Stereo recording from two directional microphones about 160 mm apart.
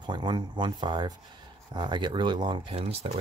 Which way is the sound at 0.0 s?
30° right (ahead or behind).